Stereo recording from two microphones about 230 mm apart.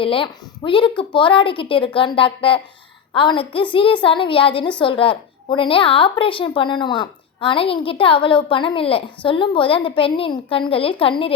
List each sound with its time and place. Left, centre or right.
0.0 s a woman's voice: left